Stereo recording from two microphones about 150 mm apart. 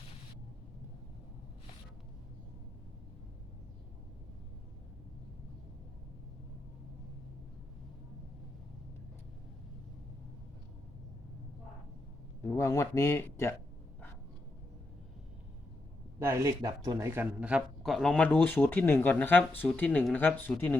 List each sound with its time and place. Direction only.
12.4 s speech: 20° left (ahead or behind)
16.2 s speech: 20° right (ahead or behind); by 20.7 s 15° left (ahead or behind)